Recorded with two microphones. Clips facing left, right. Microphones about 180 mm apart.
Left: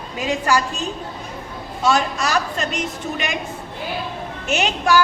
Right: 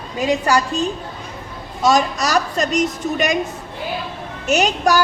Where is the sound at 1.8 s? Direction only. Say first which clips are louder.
Right 3 dB; 40° right (ahead or behind).